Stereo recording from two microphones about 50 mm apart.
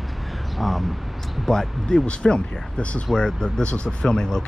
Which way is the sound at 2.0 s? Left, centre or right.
Centre.